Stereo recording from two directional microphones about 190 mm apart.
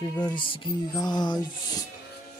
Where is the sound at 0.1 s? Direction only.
20° left (ahead or behind).